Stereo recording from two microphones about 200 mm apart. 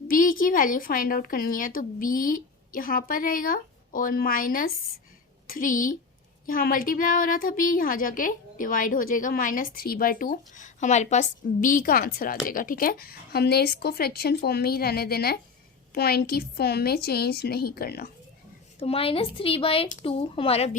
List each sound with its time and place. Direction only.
0.1 s a woman's voice: 45° left (ahead or behind)
18.8 s speech: 30° left (ahead or behind)